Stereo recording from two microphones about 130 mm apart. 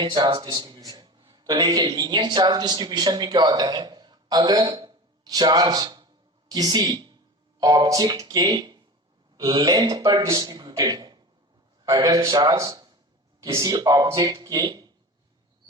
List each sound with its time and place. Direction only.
0.0 s a man's voice: 40° right (ahead or behind)